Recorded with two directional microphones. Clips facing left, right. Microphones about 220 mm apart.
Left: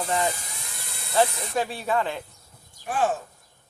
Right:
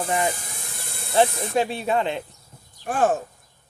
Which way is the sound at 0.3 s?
50° right (ahead or behind).